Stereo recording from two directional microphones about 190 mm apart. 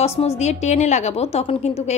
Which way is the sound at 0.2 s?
35° left (ahead or behind).